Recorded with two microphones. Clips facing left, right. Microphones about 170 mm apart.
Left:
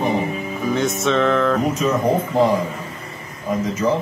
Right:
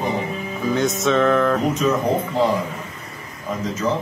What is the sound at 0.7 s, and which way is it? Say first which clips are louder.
Speech: right 1 dB; centre (ahead or behind).